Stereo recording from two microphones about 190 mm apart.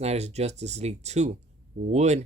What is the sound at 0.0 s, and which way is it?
Speech, 35° right (ahead or behind).